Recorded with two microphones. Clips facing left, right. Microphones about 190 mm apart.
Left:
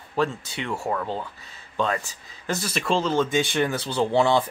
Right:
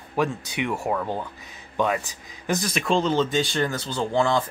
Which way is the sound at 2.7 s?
Centre (ahead or behind).